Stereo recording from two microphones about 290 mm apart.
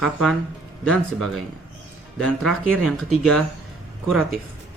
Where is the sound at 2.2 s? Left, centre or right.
Centre.